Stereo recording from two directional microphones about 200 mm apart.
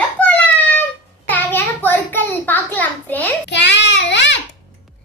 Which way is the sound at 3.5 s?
60° left (ahead or behind).